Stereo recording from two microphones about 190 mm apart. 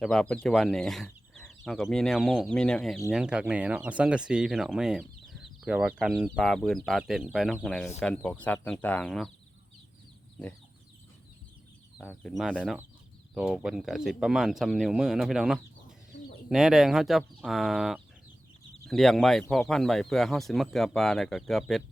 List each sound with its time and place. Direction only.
0.0 s speech: 5° left (ahead or behind)
12.0 s speech: centre (ahead or behind)